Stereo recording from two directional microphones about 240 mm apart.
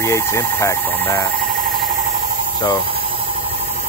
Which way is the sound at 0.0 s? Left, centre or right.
Centre.